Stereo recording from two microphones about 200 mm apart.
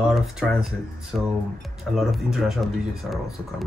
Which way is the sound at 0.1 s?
Centre (ahead or behind).